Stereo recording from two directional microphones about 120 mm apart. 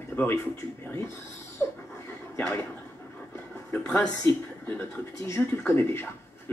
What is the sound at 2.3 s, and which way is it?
Speech, 10° left (ahead or behind).